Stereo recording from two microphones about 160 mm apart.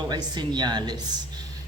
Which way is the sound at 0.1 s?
25° right (ahead or behind).